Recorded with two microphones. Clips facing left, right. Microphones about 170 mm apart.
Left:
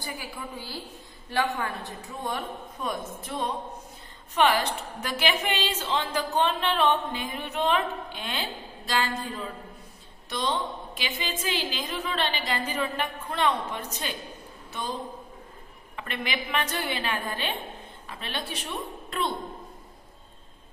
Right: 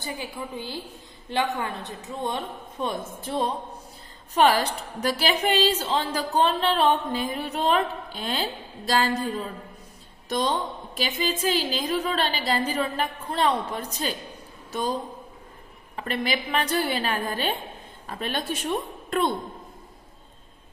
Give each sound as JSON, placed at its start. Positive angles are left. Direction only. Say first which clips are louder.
{"t": 0.0, "sound": "a woman's voice", "louder": "right 4 dB", "side_deg": -20}
{"t": 16.0, "sound": "a woman's voice", "louder": "right 5 dB", "side_deg": -35}